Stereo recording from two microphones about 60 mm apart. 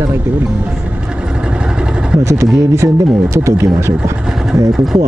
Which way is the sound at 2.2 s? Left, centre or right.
Right.